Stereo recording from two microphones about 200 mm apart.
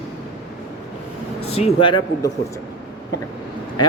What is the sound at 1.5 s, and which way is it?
Speech, 25° left (ahead or behind).